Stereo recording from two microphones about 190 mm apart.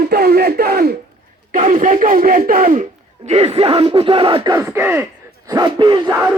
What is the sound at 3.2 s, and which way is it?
Speech, 30° right (ahead or behind).